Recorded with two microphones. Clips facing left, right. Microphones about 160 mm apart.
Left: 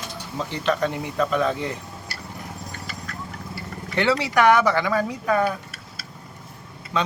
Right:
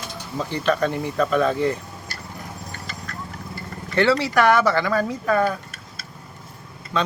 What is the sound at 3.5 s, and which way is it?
Speech, 15° left (ahead or behind).